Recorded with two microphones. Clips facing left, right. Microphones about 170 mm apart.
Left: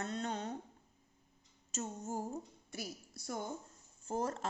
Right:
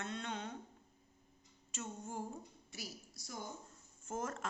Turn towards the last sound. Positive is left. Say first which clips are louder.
# left 4 dB
turn(degrees=35)  # may be behind; listen again after turning